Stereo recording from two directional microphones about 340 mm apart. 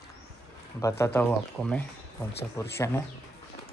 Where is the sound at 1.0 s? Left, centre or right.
Centre.